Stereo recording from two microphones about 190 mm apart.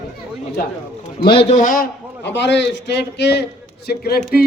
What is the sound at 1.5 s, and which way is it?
A man's voice, 45° left (ahead or behind).